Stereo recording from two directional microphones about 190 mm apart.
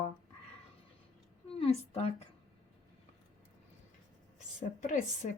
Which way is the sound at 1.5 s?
30° left (ahead or behind).